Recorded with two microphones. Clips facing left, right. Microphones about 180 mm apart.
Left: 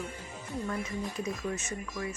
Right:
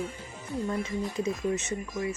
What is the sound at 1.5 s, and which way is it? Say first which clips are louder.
Speech: right 5 dB; 20° right (ahead or behind).